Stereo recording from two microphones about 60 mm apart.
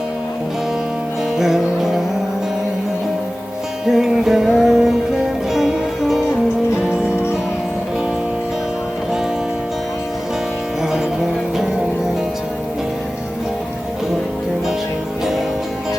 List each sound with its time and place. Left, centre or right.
1.4 s music: centre
3.8 s music: centre
6.7 s music: centre